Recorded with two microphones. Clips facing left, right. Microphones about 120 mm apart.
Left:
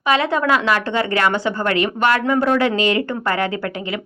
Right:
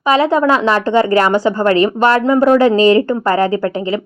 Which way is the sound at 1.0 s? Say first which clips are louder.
Right 6 dB; 40° right (ahead or behind).